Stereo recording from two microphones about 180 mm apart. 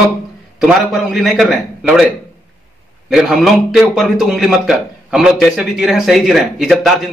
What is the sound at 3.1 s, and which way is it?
A man's voice, centre (ahead or behind).